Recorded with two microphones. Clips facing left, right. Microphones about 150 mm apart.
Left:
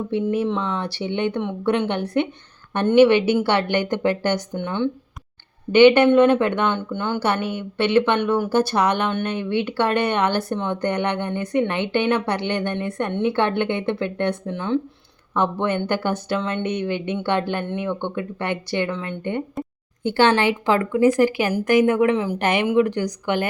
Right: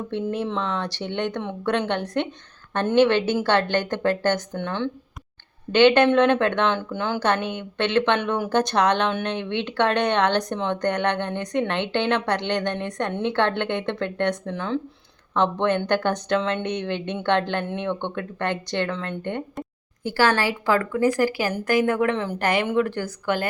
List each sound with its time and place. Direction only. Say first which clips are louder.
0.3 s speech: left 3 dB; 5° left (ahead or behind)
4.5 s speech: left 3 dB; 5° left (ahead or behind)
6.7 s speech: left 1 dB; centre (ahead or behind)
15.9 s speech: right 1 dB; 10° left (ahead or behind)
20.1 s a woman's voice: left 4 dB; 25° left (ahead or behind)